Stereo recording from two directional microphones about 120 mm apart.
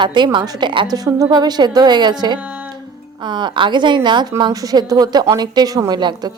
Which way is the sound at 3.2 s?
40° right (ahead or behind).